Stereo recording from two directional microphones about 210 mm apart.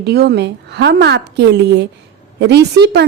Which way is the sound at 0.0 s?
50° right (ahead or behind).